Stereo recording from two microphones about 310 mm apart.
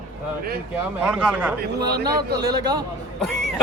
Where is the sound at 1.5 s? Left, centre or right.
Right.